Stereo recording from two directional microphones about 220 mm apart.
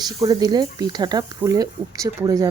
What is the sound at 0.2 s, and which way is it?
Speech, 15° right (ahead or behind).